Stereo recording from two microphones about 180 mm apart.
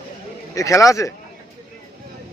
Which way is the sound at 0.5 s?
15° left (ahead or behind).